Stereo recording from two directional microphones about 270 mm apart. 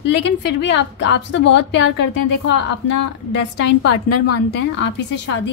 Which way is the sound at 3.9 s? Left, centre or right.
Left.